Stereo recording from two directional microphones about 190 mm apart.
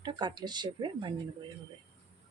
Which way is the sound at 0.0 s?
20° right (ahead or behind).